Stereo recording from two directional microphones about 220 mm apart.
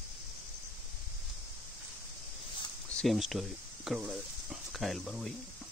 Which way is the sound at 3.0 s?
Centre (ahead or behind).